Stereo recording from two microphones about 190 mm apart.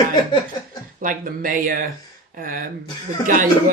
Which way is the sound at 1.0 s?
45° right (ahead or behind).